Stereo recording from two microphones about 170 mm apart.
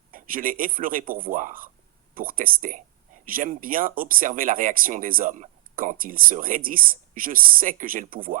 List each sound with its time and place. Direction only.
0.1 s speech: 55° right (ahead or behind)